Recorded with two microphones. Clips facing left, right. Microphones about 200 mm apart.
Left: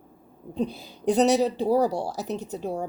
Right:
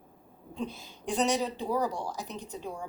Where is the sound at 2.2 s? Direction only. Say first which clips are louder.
Left 9 dB; 70° left (ahead or behind).